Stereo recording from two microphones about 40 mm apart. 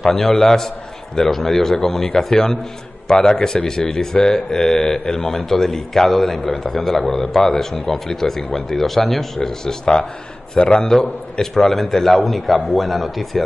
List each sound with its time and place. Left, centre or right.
0.0 s a man's voice: centre
10.5 s a man's voice: left
10.8 s a man's voice: centre
11.5 s a man's voice: centre